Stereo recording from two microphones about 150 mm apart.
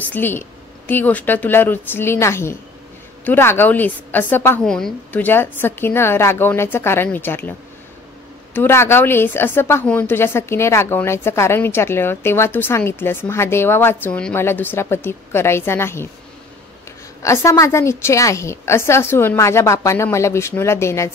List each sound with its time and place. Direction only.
0.0 s a woman's voice: 10° left (ahead or behind)
8.5 s a woman's voice: 15° left (ahead or behind)
17.2 s a woman's voice: 20° left (ahead or behind)